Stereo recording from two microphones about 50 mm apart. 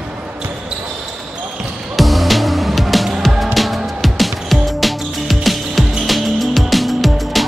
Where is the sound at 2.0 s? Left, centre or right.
Centre.